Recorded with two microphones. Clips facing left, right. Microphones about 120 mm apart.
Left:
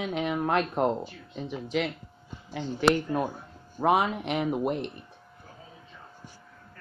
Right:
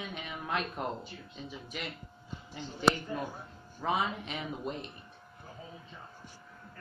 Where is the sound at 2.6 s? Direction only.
70° left (ahead or behind).